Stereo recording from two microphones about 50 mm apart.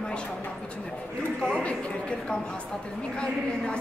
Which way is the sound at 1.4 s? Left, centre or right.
Left.